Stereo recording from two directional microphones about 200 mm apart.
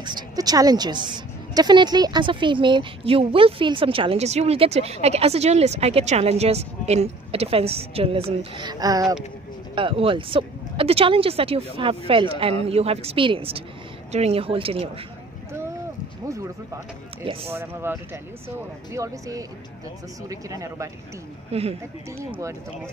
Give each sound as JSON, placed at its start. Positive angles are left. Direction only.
{"t": 0.0, "sound": "a woman's voice", "side_deg": -20}
{"t": 17.2, "sound": "a woman's voice", "side_deg": -25}
{"t": 17.5, "sound": "speech", "side_deg": -10}
{"t": 21.5, "sound": "speech", "side_deg": -30}